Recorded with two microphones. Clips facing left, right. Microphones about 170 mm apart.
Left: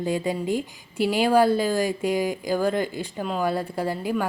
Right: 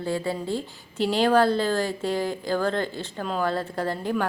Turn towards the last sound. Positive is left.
turn(degrees=10)  # may be behind; listen again after turning